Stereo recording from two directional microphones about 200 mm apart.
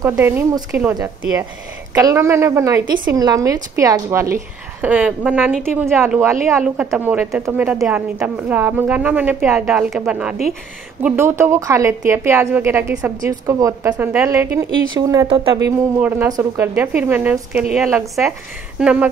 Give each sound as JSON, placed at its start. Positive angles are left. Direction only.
{"t": 0.0, "sound": "a woman's voice", "side_deg": -15}
{"t": 15.2, "sound": "speech", "side_deg": -25}
{"t": 15.6, "sound": "a woman's voice", "side_deg": -10}